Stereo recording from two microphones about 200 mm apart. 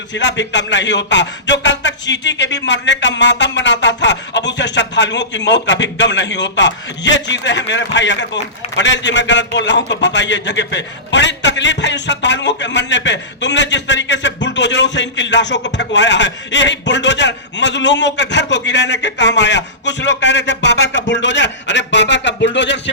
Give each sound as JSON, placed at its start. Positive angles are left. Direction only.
{"t": 0.1, "sound": "a man's voice", "side_deg": 65}